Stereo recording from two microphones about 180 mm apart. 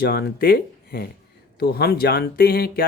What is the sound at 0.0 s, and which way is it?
Speech, 60° left (ahead or behind).